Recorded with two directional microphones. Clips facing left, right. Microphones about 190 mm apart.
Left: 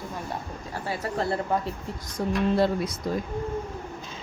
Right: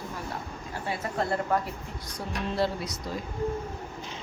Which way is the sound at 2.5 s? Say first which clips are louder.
Left 5 dB; 50° left (ahead or behind).